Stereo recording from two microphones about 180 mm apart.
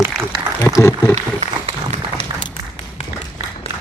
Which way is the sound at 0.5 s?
15° left (ahead or behind).